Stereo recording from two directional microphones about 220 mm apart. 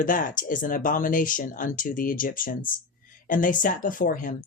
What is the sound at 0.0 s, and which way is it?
Speech, 35° left (ahead or behind).